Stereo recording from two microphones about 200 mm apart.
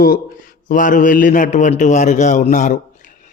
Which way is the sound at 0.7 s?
40° left (ahead or behind).